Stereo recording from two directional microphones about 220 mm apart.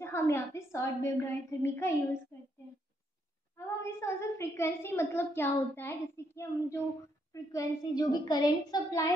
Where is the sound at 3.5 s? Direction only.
10° left (ahead or behind).